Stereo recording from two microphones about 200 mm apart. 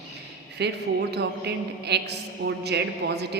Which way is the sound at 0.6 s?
55° right (ahead or behind).